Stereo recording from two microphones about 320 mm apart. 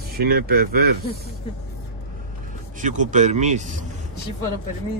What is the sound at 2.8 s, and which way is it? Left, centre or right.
Speech, right.